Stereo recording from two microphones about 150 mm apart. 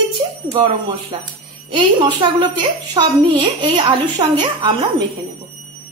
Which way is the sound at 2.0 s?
30° right (ahead or behind).